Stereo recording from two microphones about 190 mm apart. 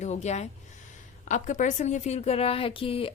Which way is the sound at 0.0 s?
35° left (ahead or behind).